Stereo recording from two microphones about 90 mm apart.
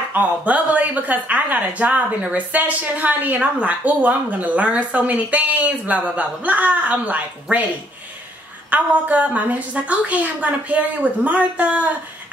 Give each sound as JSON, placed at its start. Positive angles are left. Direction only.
{"t": 0.1, "sound": "a woman's voice", "side_deg": -15}
{"t": 8.6, "sound": "a woman's voice", "side_deg": -15}